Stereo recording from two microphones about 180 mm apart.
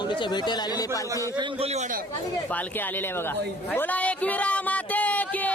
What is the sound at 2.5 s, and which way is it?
Speech, 10° left (ahead or behind).